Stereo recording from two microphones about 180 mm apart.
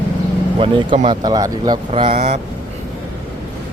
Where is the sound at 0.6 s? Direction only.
25° right (ahead or behind).